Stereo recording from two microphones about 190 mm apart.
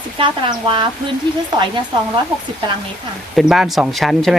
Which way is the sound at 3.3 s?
Centre (ahead or behind).